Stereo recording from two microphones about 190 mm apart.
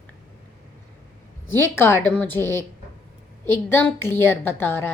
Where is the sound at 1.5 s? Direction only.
10° left (ahead or behind).